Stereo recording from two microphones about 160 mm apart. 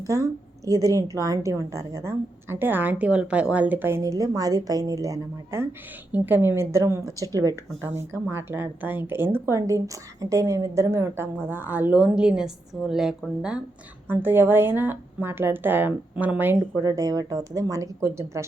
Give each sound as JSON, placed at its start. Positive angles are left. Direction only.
{"t": 0.0, "sound": "a woman's voice", "side_deg": -20}